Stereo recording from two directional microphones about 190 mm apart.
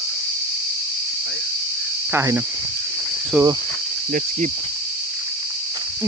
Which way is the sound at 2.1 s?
15° right (ahead or behind).